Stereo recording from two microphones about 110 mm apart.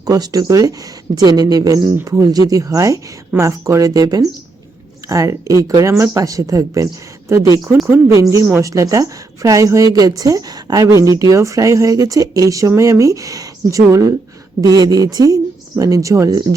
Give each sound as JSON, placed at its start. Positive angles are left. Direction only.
{"t": 0.0, "sound": "a woman's voice", "side_deg": -35}